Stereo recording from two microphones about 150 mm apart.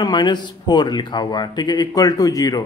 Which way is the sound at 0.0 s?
30° left (ahead or behind).